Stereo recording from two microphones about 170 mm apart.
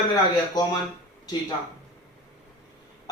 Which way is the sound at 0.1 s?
25° left (ahead or behind).